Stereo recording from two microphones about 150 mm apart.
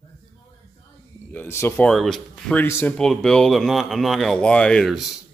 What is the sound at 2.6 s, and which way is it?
Speech, 15° left (ahead or behind).